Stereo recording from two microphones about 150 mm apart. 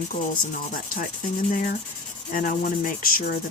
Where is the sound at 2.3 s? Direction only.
60° left (ahead or behind).